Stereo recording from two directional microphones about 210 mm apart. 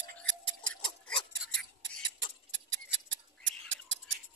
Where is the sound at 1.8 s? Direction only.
60° right (ahead or behind).